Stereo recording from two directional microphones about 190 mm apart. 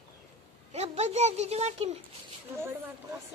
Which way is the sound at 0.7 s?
35° right (ahead or behind).